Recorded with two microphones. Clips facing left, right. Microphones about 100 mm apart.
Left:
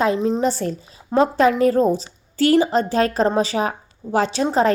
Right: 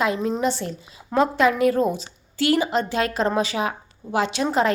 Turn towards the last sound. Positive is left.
turn(degrees=35)  # may be behind; listen again after turning